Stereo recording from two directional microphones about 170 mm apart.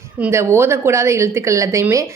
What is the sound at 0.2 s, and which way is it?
A woman's voice, 15° right (ahead or behind).